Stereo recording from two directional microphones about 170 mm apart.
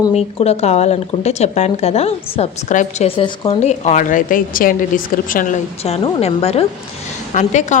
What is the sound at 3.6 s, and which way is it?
Speech, 40° left (ahead or behind).